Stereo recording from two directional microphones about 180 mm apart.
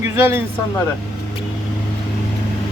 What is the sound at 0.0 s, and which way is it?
Speech, 15° right (ahead or behind).